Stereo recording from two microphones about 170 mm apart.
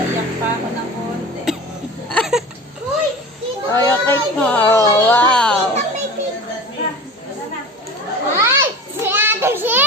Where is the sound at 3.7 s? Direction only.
15° left (ahead or behind).